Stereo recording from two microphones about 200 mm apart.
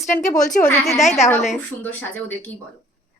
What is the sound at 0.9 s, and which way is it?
Speech, 35° left (ahead or behind).